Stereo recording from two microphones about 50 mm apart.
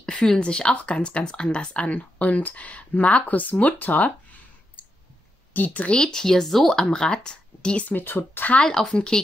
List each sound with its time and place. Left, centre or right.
0.0 s speech: centre; by 4.1 s left
5.5 s a woman's voice: left
5.9 s speech: centre
7.9 s speech: left
8.6 s speech: centre